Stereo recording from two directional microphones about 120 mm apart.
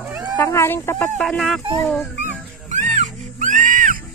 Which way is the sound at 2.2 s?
90° right.